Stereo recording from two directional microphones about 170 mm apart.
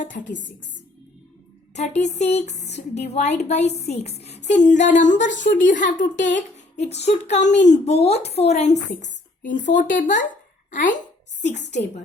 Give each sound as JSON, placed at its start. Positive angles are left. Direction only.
{"t": 0.1, "sound": "speech", "side_deg": 55}
{"t": 1.7, "sound": "speech", "side_deg": 40}
{"t": 6.3, "sound": "a sound", "side_deg": 40}
{"t": 7.6, "sound": "speech", "side_deg": 40}